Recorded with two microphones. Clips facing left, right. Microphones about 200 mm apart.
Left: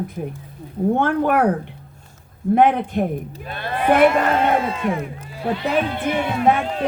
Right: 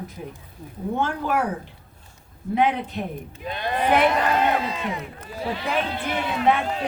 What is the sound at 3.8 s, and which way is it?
Speech, 50° left (ahead or behind).